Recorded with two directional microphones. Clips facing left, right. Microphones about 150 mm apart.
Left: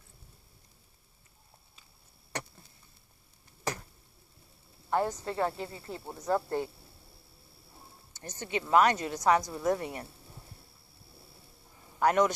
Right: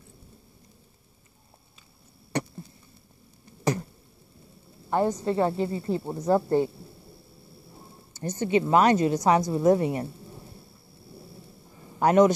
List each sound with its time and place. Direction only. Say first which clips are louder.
4.8 s a woman's voice: right 6 dB; 15° right (ahead or behind)
8.2 s speech: right 11 dB; 25° right (ahead or behind)
12.0 s speech: right 7 dB; 25° right (ahead or behind)